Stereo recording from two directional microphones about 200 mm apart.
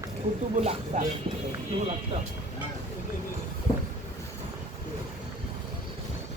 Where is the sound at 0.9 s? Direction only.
35° right (ahead or behind).